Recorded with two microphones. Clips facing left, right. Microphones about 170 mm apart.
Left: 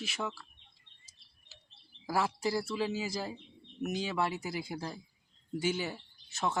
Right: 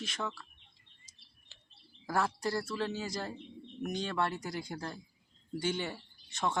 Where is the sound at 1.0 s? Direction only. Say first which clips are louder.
Right 3 dB; 5° left (ahead or behind).